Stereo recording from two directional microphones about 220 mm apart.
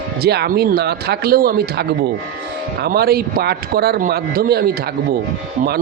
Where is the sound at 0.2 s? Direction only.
45° right (ahead or behind).